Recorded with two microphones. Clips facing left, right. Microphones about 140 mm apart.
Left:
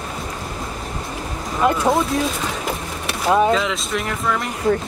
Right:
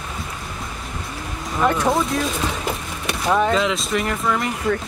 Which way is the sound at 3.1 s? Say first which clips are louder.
Left 2 dB; 15° left (ahead or behind).